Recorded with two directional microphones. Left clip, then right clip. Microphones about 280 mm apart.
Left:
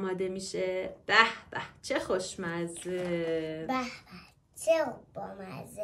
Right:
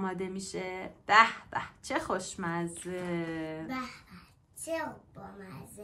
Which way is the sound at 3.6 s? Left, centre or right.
Left.